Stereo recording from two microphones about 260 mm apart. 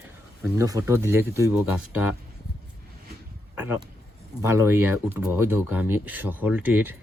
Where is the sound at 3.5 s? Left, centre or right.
Centre.